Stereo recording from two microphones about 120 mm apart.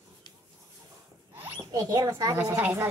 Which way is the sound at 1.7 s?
25° right (ahead or behind).